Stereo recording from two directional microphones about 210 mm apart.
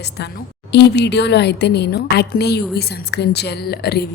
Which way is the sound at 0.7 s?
55° left (ahead or behind).